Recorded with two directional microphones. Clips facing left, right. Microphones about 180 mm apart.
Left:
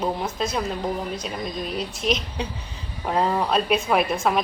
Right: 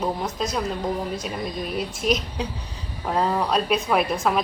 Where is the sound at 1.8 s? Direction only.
45° right (ahead or behind).